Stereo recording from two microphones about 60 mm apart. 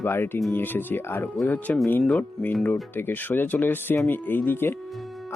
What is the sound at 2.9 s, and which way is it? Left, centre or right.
Speech, left.